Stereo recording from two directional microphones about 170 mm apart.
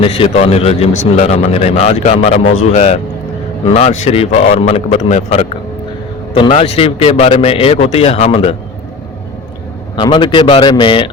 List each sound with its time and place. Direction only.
0.0 s speech: 35° left (ahead or behind)
6.5 s speech: 35° left (ahead or behind)
9.9 s a man's voice: 25° left (ahead or behind)